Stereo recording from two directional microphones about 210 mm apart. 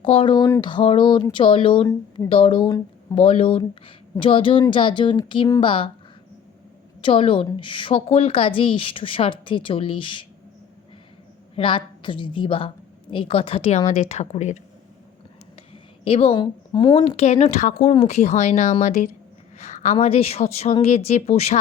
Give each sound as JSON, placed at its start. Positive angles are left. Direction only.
{"t": 0.0, "sound": "a woman's voice", "side_deg": 25}
{"t": 3.2, "sound": "a woman's voice", "side_deg": 25}
{"t": 7.0, "sound": "a woman's voice", "side_deg": 25}
{"t": 11.5, "sound": "a woman's voice", "side_deg": 25}
{"t": 15.7, "sound": "a woman's voice", "side_deg": 25}